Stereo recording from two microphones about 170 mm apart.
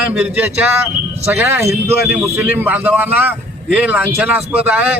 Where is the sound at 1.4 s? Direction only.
15° right (ahead or behind).